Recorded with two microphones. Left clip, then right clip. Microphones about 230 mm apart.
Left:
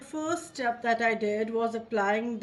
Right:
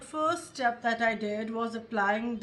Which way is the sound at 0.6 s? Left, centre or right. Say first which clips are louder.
Left 1 dB; right.